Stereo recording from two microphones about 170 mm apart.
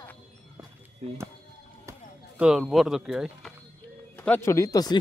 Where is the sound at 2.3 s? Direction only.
5° right (ahead or behind); by 4.9 s 20° left (ahead or behind).